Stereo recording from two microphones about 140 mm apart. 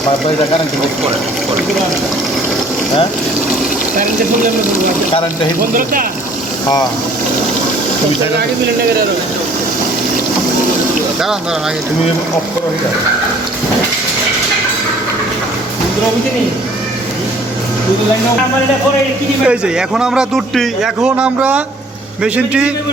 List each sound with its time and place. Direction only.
5.7 s speech: 80° right
19.5 s a man's voice: 5° right (ahead or behind)